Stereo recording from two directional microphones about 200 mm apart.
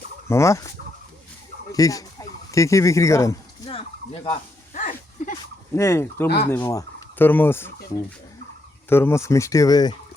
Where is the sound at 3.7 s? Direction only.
30° left (ahead or behind).